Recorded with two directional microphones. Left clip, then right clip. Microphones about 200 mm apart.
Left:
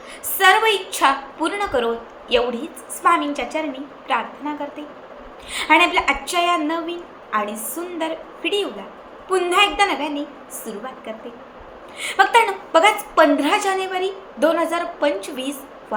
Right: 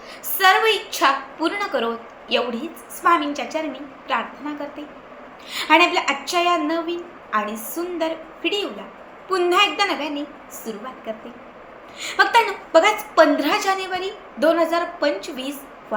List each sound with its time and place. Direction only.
0.3 s a woman's voice: 5° left (ahead or behind)
11.9 s a woman's voice: 5° left (ahead or behind)